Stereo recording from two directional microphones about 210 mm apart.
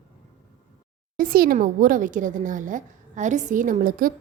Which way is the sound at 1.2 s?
45° right (ahead or behind).